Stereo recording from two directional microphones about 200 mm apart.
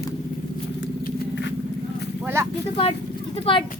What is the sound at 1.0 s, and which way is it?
Vehicle, 60° left (ahead or behind).